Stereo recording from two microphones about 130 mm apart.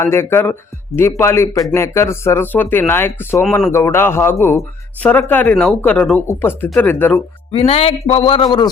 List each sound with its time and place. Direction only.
0.0 s speech: 20° left (ahead or behind)
7.5 s a man's voice: 50° left (ahead or behind)